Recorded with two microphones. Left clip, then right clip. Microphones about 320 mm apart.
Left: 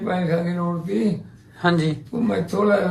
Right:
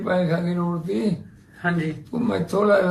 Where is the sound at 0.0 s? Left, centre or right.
Centre.